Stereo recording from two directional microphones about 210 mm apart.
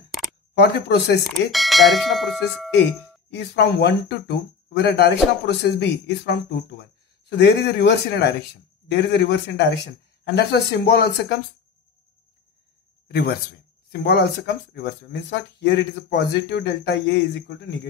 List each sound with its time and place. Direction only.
0.6 s a man's voice: 50° left (ahead or behind)
1.5 s speech: centre (ahead or behind)
3.3 s a man's voice: 55° left (ahead or behind)
13.1 s a man's voice: 50° left (ahead or behind)